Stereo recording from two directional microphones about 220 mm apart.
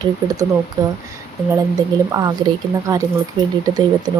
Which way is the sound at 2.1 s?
15° right (ahead or behind).